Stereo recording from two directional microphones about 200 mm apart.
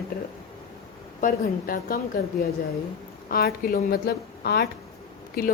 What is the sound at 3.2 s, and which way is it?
A woman's voice, 50° left (ahead or behind).